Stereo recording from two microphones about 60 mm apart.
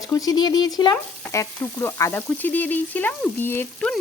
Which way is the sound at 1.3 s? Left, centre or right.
Left.